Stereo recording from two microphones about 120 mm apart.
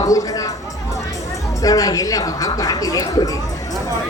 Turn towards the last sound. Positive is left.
turn(degrees=30)  # may be behind; listen again after turning